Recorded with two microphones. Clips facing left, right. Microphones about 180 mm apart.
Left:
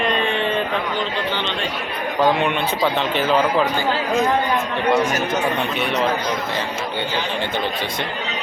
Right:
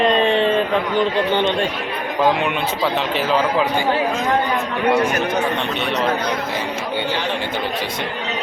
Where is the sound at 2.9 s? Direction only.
5° right (ahead or behind).